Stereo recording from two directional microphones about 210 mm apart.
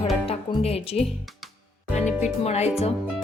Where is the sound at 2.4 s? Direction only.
30° left (ahead or behind).